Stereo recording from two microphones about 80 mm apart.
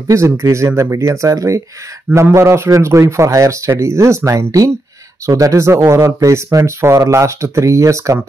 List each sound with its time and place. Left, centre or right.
0.1 s speech: right